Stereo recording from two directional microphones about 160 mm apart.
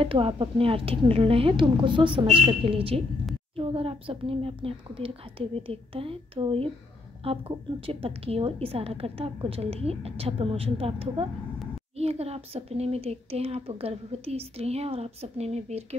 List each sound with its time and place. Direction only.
0.0 s speech: 35° right (ahead or behind)